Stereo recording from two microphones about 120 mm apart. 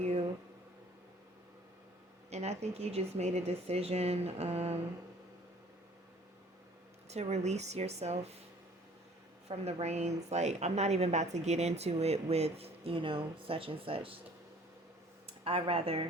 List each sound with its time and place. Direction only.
0.0 s a sound: 60° right (ahead or behind)
2.3 s a woman's voice: 65° right (ahead or behind)
7.1 s speech: 65° right (ahead or behind)
9.5 s a woman's voice: 65° right (ahead or behind); by 14.2 s 50° right (ahead or behind)
15.4 s speech: 50° right (ahead or behind)